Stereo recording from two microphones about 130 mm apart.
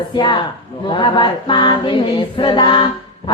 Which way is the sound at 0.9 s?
40° left (ahead or behind).